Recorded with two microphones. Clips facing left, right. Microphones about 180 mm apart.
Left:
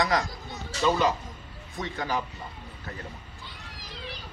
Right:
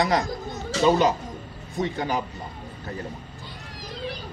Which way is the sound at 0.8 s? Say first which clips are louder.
Right 5 dB; 20° right (ahead or behind).